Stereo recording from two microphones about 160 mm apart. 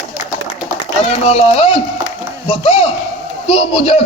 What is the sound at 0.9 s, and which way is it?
A man's voice, 40° left (ahead or behind).